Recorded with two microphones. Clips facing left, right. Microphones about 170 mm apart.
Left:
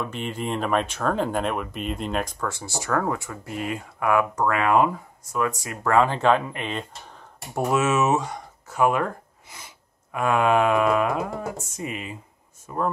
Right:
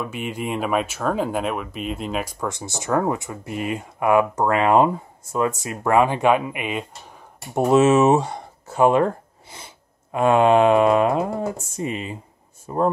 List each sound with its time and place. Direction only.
0.0 s speech: 10° right (ahead or behind)
2.4 s speech: 20° right (ahead or behind)
7.5 s speech: 25° right (ahead or behind)